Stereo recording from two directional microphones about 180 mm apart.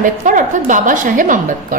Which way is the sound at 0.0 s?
45° right (ahead or behind).